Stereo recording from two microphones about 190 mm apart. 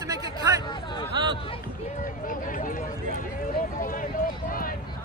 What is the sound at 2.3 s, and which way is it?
Speech, 45° left (ahead or behind).